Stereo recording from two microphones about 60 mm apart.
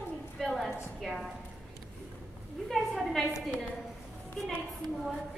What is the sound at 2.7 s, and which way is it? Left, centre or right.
Speech, centre.